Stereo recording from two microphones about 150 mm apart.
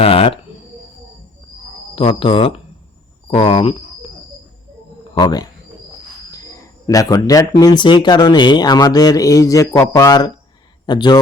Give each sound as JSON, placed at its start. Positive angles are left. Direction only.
{"t": 0.0, "sound": "speech", "side_deg": 40}
{"t": 2.0, "sound": "speech", "side_deg": 35}
{"t": 5.1, "sound": "speech", "side_deg": 30}